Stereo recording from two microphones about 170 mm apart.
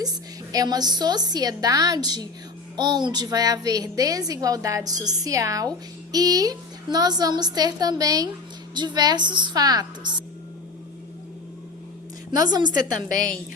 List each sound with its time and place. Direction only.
0.5 s a woman's voice: 20° right (ahead or behind)
12.4 s a woman's voice: 25° right (ahead or behind)